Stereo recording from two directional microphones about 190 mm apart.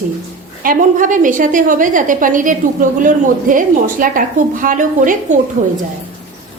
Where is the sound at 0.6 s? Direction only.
45° right (ahead or behind).